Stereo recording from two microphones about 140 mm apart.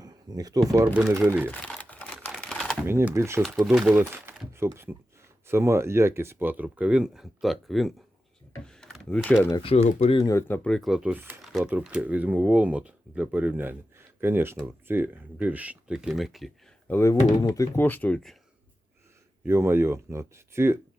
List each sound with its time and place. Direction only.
0.0 s speech: 25° right (ahead or behind)
0.9 s speech: 15° right (ahead or behind)
1.5 s typing: 10° left (ahead or behind)
2.8 s speech: 15° right (ahead or behind)
3.4 s speech: centre (ahead or behind)
8.6 s a sound: 5° left (ahead or behind)
9.7 s speech: 50° left (ahead or behind)
10.2 s speech: 25° left (ahead or behind)
10.5 s speech: 5° left (ahead or behind)
16.9 s speech: 15° left (ahead or behind)
19.5 s speech: 20° right (ahead or behind)